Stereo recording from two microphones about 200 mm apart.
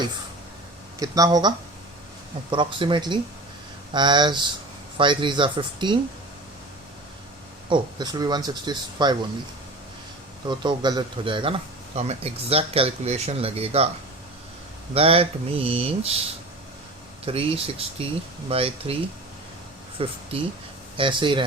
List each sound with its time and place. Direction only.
0.9 s speech: 15° right (ahead or behind)
7.7 s speech: 20° right (ahead or behind)
10.4 s speech: 20° right (ahead or behind)
14.9 s speech: 30° right (ahead or behind)
17.2 s speech: 25° right (ahead or behind)
20.0 s speech: 25° right (ahead or behind)